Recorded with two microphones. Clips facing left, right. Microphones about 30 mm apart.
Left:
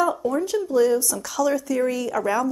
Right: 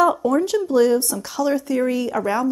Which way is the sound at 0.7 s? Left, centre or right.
Right.